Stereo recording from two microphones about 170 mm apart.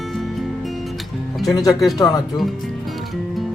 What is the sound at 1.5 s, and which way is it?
Speech, 20° left (ahead or behind).